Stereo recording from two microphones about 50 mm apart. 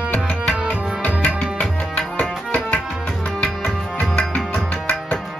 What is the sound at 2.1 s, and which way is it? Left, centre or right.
Tabla, left.